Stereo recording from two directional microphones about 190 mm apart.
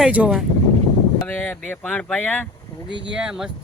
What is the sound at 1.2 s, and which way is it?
Speech, 10° left (ahead or behind).